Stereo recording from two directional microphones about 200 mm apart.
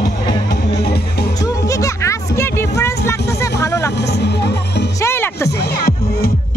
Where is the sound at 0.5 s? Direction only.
55° left (ahead or behind).